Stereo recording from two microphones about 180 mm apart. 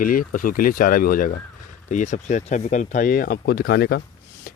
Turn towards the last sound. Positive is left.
turn(degrees=60)  # may be behind; listen again after turning